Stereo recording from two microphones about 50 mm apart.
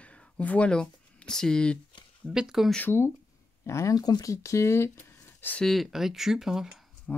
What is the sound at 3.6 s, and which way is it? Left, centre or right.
Speech, left.